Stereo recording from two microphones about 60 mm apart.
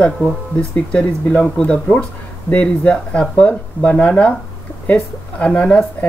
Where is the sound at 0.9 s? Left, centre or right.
Centre.